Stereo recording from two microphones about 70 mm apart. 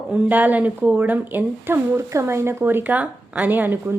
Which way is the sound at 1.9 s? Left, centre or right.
Right.